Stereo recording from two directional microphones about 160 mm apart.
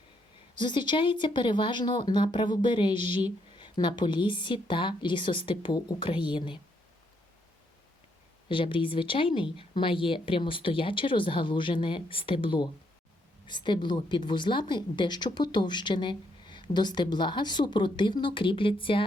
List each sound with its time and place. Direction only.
0.5 s speech: 30° left (ahead or behind)
8.4 s speech: 30° left (ahead or behind)